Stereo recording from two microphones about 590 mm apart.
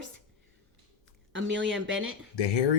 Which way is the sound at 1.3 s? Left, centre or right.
Centre.